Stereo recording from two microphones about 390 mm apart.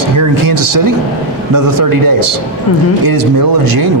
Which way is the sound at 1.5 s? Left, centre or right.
Right.